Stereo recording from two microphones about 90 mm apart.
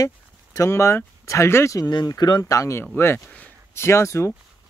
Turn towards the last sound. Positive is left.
turn(degrees=30)  # may be behind; listen again after turning